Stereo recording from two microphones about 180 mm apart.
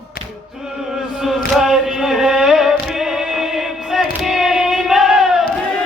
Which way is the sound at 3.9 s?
Centre (ahead or behind).